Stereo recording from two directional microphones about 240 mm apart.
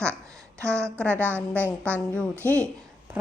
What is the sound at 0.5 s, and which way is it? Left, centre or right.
A woman's voice, centre.